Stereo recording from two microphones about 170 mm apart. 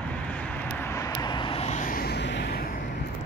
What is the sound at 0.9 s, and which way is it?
Vehicle, 20° left (ahead or behind).